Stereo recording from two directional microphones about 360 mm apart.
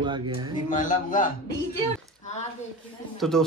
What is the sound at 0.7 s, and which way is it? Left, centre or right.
Speech, left.